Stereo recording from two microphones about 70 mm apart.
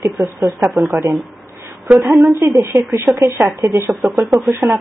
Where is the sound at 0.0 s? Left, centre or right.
Right.